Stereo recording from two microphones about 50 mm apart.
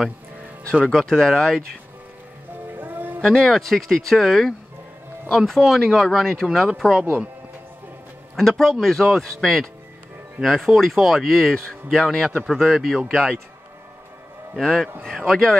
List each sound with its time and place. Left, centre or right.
0.8 s speech: centre
2.8 s music: right
3.3 s speech: centre
6.0 s speech: centre
8.4 s speech: centre
12.4 s speech: centre
13.1 s speech: centre
14.6 s speech: centre